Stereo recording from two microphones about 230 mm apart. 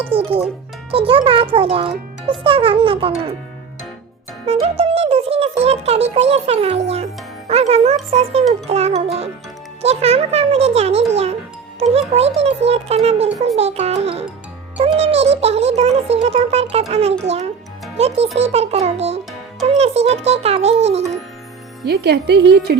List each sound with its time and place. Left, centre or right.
0.1 s a child's voice: right
4.4 s a child's voice: right
21.8 s speech: right